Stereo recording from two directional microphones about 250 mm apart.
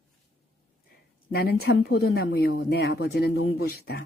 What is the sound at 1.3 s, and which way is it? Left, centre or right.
Speech, left.